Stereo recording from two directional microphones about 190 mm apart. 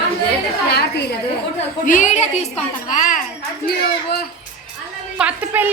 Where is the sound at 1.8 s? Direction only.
40° left (ahead or behind).